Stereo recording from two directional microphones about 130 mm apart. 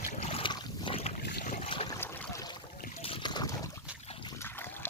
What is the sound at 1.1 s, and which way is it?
Boat, 70° left (ahead or behind).